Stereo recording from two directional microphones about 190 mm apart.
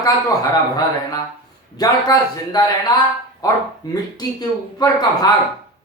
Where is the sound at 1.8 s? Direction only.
20° left (ahead or behind).